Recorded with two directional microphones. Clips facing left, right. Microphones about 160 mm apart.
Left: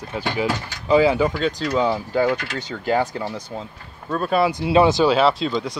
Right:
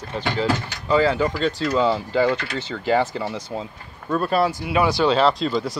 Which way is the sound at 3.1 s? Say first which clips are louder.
Right 1 dB; 5° right (ahead or behind).